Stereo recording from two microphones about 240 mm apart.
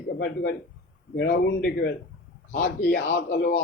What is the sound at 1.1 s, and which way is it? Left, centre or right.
Speech, left.